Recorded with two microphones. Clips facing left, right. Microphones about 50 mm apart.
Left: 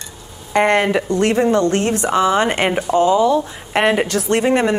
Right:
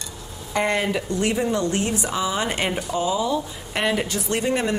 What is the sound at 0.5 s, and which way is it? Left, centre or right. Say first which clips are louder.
Speech: left 8 dB; left.